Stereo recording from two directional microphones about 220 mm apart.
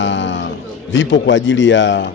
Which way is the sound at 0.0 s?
55° left (ahead or behind).